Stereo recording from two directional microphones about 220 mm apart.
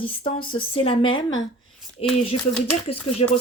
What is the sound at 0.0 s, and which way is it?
Speech, 25° left (ahead or behind).